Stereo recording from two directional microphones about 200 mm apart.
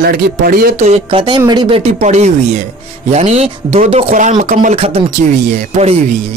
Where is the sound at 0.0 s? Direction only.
45° right (ahead or behind); by 1.8 s 20° right (ahead or behind).